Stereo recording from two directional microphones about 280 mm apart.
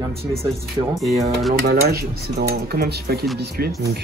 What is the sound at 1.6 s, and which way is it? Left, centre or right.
Speech, right.